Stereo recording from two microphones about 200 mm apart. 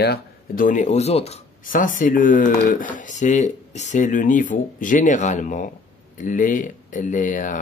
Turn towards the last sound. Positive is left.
turn(degrees=40)  # may be behind; listen again after turning